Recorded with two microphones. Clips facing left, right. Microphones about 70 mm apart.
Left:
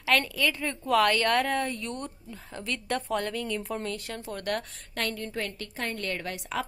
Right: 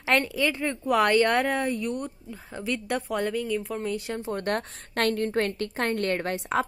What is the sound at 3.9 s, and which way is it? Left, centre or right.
Speech, right.